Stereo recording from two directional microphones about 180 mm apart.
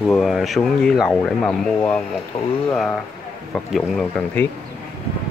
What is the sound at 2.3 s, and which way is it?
Speech, 35° left (ahead or behind).